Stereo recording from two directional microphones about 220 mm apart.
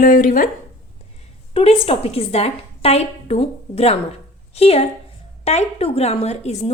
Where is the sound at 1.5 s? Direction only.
25° left (ahead or behind).